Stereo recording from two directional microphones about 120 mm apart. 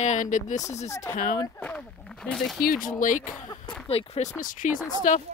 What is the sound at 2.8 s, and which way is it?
Speech, 90° left.